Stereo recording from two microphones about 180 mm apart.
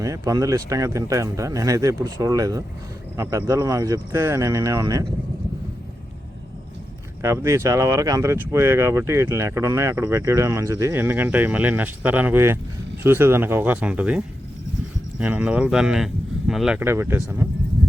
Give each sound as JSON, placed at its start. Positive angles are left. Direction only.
{"t": 0.0, "sound": "speech", "side_deg": -20}
{"t": 7.2, "sound": "speech", "side_deg": -15}